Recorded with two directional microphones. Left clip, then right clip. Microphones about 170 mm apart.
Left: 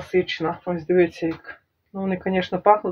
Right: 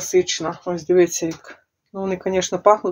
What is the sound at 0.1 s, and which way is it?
Speech, 40° right (ahead or behind).